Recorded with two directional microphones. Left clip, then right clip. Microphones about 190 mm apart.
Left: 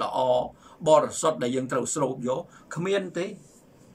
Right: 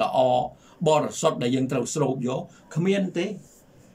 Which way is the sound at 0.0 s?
15° right (ahead or behind).